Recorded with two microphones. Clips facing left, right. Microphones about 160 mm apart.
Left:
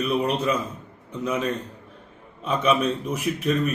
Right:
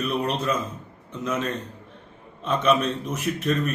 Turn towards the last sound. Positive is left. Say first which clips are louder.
# left 1 dB
turn(degrees=10)  # may be behind; listen again after turning